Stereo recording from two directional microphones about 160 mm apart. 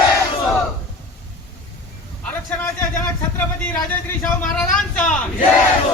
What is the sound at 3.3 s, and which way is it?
Speech, 10° left (ahead or behind).